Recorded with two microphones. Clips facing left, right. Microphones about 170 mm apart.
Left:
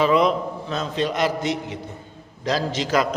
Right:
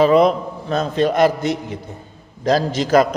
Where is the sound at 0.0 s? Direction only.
45° right (ahead or behind).